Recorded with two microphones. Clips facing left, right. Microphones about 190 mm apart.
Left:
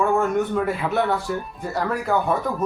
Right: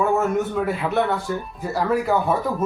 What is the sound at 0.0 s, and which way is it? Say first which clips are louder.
Speech: even; 5° right (ahead or behind).